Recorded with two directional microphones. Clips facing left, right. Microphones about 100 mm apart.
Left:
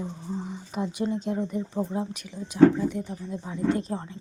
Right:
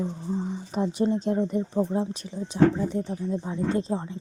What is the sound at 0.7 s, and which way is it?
Speech, 35° right (ahead or behind).